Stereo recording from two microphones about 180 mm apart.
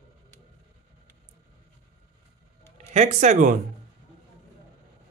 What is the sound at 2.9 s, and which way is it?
Speech, 40° right (ahead or behind).